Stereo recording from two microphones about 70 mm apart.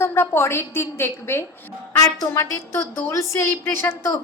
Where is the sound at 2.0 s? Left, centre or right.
Left.